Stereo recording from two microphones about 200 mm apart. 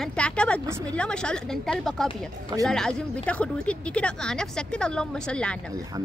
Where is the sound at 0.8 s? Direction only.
5° left (ahead or behind).